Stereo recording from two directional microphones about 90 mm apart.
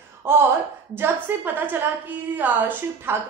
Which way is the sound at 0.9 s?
25° right (ahead or behind).